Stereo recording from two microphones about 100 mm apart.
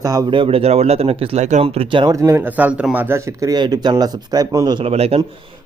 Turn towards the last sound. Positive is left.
turn(degrees=-90)